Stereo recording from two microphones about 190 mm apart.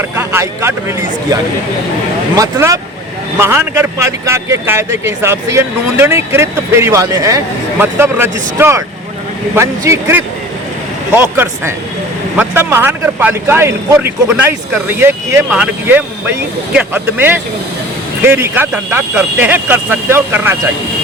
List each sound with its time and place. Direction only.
0.2 s speech: 15° right (ahead or behind)